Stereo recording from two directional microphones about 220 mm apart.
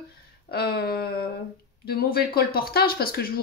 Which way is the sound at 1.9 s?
45° left (ahead or behind).